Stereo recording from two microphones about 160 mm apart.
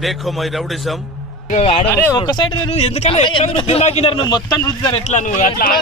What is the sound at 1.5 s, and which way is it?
Speech, 40° left (ahead or behind).